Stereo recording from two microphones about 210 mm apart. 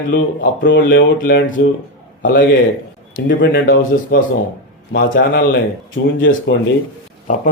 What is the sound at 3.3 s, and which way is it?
Speech, 55° left (ahead or behind).